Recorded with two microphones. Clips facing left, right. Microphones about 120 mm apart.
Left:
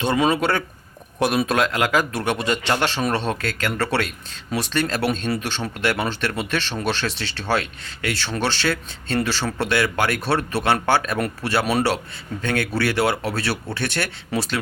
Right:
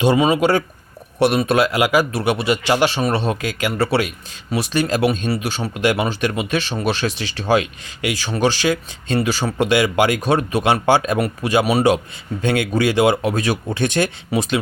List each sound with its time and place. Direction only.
0.0 s speech: 10° right (ahead or behind)